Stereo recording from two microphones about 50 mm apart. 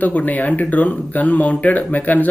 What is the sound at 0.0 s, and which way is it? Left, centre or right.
Speech, left.